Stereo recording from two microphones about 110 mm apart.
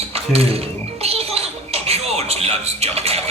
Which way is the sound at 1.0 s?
65° right (ahead or behind).